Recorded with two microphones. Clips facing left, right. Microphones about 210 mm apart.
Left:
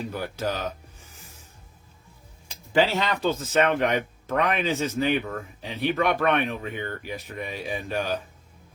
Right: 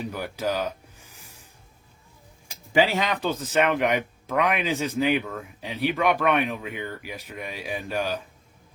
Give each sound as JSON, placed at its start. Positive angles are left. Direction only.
{"t": 0.0, "sound": "music", "side_deg": -10}
{"t": 2.7, "sound": "speech", "side_deg": -15}